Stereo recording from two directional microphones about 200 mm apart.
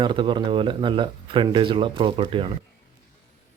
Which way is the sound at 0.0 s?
25° right (ahead or behind).